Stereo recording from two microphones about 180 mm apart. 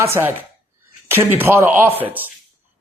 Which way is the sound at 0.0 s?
15° right (ahead or behind).